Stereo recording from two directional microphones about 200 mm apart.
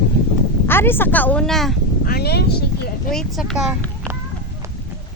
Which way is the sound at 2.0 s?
50° left (ahead or behind).